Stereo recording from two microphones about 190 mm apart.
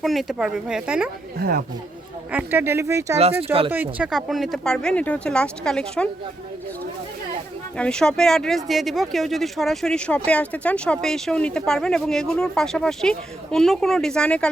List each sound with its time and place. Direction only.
0.0 s speech: centre (ahead or behind)
1.4 s speech: 50° right (ahead or behind)
2.3 s speech: 10° right (ahead or behind)
3.4 s speech: 30° right (ahead or behind)
3.7 s speech: 10° right (ahead or behind)
7.8 s speech: 5° left (ahead or behind)